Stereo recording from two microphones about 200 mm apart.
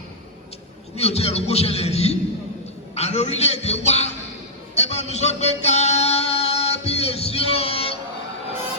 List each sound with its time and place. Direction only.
0.9 s a man's voice: 30° left (ahead or behind)
4.7 s music: 35° left (ahead or behind)